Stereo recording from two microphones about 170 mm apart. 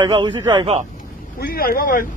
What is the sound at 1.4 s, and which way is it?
Speech, 60° left (ahead or behind).